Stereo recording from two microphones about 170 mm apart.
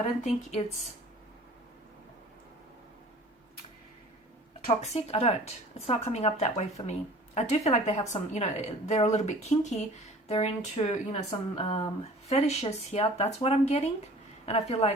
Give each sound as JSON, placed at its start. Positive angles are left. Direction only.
{"t": 0.2, "sound": "speech", "side_deg": 45}
{"t": 4.6, "sound": "speech", "side_deg": 40}